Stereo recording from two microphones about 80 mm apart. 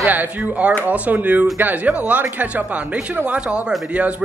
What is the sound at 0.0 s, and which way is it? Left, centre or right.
Speech, right.